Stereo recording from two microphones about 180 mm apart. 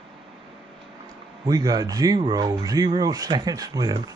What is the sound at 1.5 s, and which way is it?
Speech, 20° right (ahead or behind).